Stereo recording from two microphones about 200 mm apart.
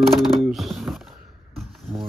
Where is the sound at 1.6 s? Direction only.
Centre (ahead or behind).